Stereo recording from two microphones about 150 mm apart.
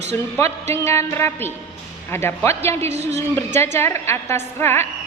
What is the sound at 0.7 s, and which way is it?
A woman's voice, 15° left (ahead or behind).